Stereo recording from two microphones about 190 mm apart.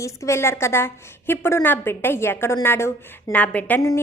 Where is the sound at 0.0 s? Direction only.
15° left (ahead or behind).